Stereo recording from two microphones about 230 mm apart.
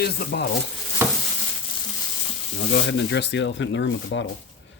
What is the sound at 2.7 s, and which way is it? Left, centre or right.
Speech, left.